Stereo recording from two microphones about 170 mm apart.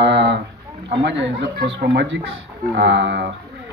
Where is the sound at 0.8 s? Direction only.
90° right.